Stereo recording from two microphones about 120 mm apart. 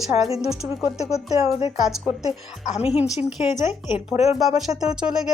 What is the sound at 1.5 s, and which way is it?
Speech, 50° left (ahead or behind).